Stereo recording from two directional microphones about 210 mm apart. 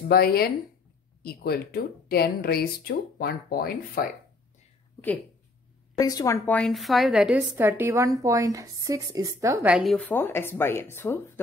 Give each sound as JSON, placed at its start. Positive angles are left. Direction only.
{"t": 0.1, "sound": "speech", "side_deg": 50}
{"t": 5.9, "sound": "a woman's voice", "side_deg": 15}
{"t": 9.9, "sound": "speech", "side_deg": 5}